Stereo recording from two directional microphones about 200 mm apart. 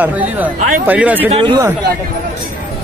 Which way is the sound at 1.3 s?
20° right (ahead or behind).